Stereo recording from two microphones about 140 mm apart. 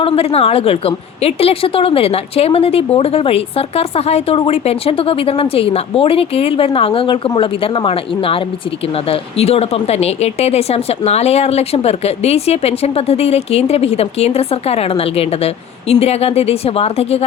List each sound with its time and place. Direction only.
0.0 s speech: 45° left (ahead or behind)